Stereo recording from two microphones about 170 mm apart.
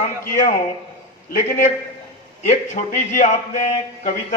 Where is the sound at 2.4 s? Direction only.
45° left (ahead or behind).